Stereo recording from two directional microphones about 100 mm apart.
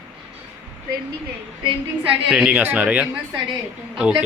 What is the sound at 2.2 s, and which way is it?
A man's voice, 10° right (ahead or behind).